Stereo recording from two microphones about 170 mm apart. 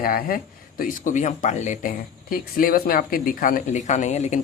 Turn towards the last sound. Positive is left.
turn(degrees=45)  # may be behind; listen again after turning